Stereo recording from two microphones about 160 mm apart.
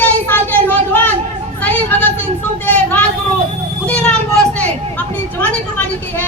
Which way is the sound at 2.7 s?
10° left (ahead or behind).